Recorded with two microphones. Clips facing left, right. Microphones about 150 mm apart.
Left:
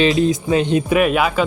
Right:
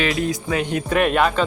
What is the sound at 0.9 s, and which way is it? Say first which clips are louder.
Speech: left 2 dB; 5° left (ahead or behind).